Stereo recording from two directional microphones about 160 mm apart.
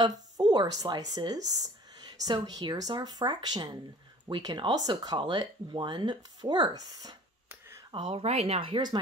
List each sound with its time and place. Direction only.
0.4 s speech: 25° right (ahead or behind)
7.9 s speech: 30° right (ahead or behind)